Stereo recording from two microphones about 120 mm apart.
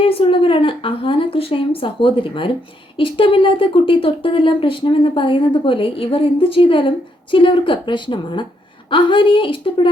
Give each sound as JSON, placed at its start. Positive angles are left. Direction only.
{"t": 0.0, "sound": "speech", "side_deg": 50}